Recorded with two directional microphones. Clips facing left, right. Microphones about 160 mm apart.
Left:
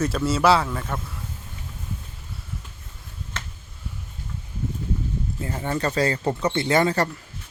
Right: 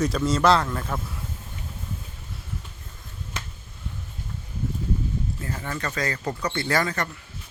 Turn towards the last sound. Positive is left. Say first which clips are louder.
# left 5 dB
turn(degrees=30)  # may be behind; listen again after turning